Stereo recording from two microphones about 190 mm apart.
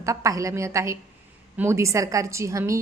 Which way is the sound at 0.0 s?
15° right (ahead or behind).